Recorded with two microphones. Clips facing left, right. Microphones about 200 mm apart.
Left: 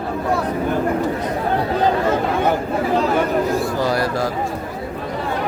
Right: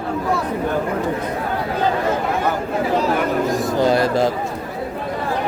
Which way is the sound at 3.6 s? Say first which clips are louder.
Right 3 dB; 20° right (ahead or behind).